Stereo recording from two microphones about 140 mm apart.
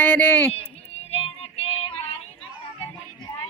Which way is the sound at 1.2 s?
45° left (ahead or behind).